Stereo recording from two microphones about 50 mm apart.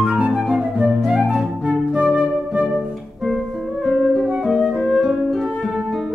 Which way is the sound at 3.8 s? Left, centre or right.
Centre.